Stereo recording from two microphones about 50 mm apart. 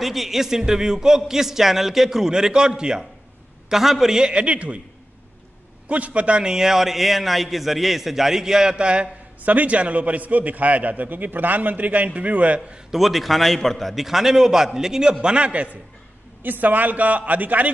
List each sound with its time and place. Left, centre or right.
0.0 s a man's voice: centre; by 4.7 s right
5.9 s a man's voice: right
9.4 s a man's voice: right
12.9 s a man's voice: centre
15.2 s a man's voice: right
16.4 s a man's voice: right